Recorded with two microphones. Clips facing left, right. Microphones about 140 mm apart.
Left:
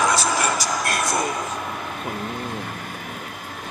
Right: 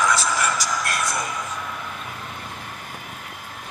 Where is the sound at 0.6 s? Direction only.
30° left (ahead or behind).